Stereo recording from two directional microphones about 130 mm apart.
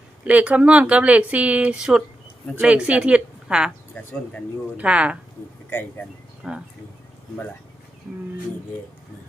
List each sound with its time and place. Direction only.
0.3 s speech: 10° right (ahead or behind)
3.9 s speech: 10° left (ahead or behind)
4.8 s speech: 10° right (ahead or behind)
6.4 s speech: 5° right (ahead or behind)